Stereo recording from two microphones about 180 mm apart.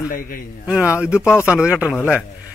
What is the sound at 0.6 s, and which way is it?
Speech, 5° right (ahead or behind).